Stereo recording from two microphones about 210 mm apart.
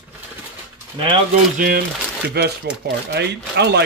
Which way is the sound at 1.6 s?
45° right (ahead or behind).